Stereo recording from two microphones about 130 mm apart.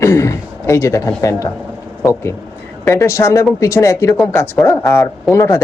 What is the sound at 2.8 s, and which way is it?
Speech, 25° left (ahead or behind).